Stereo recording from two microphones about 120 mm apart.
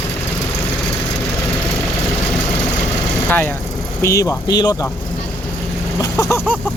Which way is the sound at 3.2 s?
15° left (ahead or behind).